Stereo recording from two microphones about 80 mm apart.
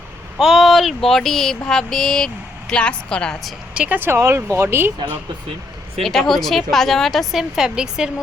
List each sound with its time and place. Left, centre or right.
0.3 s speech: centre
3.8 s speech: right
4.2 s speech: right
6.0 s speech: centre